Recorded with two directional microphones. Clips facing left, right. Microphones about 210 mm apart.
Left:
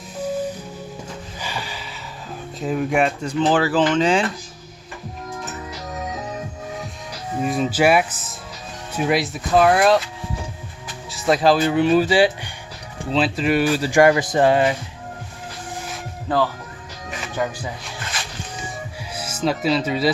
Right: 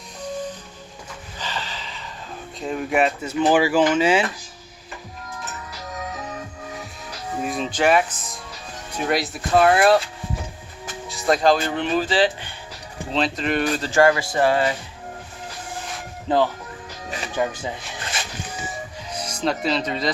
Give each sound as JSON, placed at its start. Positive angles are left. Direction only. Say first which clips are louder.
{"t": 0.2, "sound": "music", "louder": "left 5 dB", "side_deg": 5}
{"t": 2.6, "sound": "speech", "louder": "left 1 dB", "side_deg": 0}
{"t": 7.4, "sound": "speech", "louder": "left 3 dB", "side_deg": 5}
{"t": 11.1, "sound": "speech", "louder": "left 1 dB", "side_deg": 0}
{"t": 16.3, "sound": "speech", "louder": "right 1 dB", "side_deg": -20}
{"t": 19.1, "sound": "speech", "louder": "left 2 dB", "side_deg": 5}